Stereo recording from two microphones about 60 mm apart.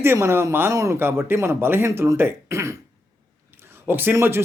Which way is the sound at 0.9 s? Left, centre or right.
Right.